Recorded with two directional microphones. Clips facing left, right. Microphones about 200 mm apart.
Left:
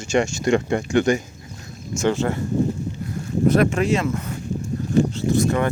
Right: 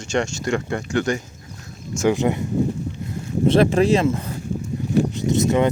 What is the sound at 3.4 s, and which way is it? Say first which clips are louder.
Speech: right 2 dB; 30° right (ahead or behind).